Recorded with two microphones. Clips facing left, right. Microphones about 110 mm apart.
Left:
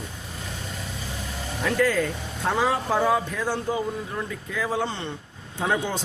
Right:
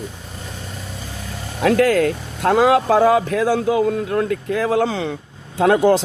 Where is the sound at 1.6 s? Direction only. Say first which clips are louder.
Right 8 dB; 75° right (ahead or behind).